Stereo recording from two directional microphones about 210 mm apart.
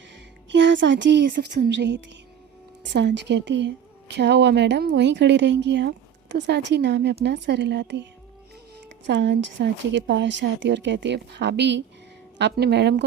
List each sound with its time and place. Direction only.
0.5 s speech: 60° right (ahead or behind)
9.0 s speech: 55° right (ahead or behind)